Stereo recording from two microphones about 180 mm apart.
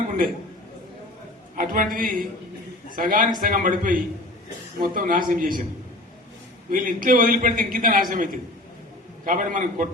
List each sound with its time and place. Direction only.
1.5 s a man's voice: 50° right (ahead or behind)
6.7 s a man's voice: 50° right (ahead or behind)